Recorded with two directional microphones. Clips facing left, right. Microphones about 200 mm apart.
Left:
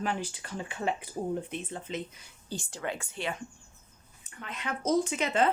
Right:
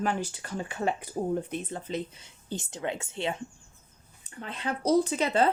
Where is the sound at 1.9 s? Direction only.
25° right (ahead or behind).